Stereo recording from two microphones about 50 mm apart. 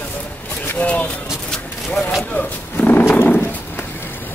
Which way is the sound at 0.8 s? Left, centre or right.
Left.